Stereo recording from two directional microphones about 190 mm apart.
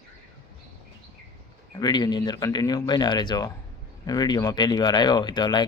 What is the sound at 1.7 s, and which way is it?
Speech, 20° left (ahead or behind).